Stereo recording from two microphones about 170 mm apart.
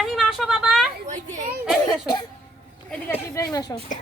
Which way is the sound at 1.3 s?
45° right (ahead or behind).